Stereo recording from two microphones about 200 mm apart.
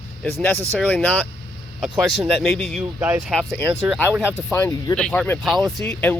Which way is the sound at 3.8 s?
10° right (ahead or behind).